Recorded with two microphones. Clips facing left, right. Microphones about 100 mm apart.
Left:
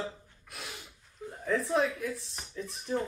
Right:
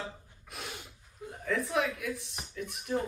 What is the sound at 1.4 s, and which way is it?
A woman's voice, 30° left (ahead or behind).